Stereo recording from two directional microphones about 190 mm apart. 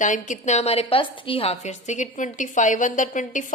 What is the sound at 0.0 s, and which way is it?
A woman's voice, 40° left (ahead or behind).